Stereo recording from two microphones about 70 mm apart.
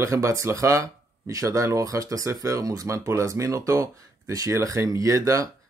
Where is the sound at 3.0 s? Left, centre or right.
Right.